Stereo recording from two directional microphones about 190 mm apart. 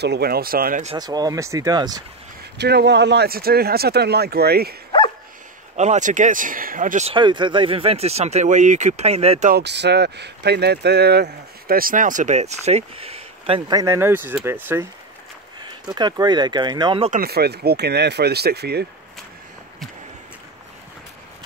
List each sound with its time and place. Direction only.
0.0 s speech: 60° right (ahead or behind)
0.9 s speech: 20° right (ahead or behind)
2.5 s speech: 60° right (ahead or behind)
5.8 s speech: 40° right (ahead or behind)
7.2 s speech: 25° right (ahead or behind)
9.5 s speech: 60° right (ahead or behind); by 17.1 s 25° right (ahead or behind)
17.1 s speech: 55° right (ahead or behind)